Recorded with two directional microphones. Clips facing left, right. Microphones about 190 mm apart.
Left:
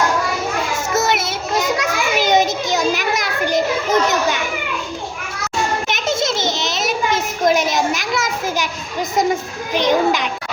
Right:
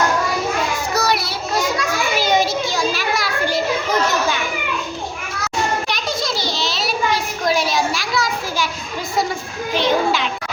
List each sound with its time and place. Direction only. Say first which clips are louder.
0.9 s child singing: left 2 dB; 20° left (ahead or behind)
1.8 s children playing: left 1 dB; 20° left (ahead or behind)
5.9 s a sound: left 3 dB; 25° left (ahead or behind)